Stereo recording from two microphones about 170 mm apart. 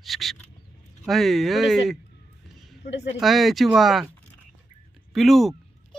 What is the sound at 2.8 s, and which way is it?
Speech, 40° left (ahead or behind).